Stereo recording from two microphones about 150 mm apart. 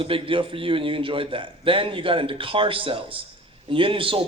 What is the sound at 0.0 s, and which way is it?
A man's voice, 35° right (ahead or behind).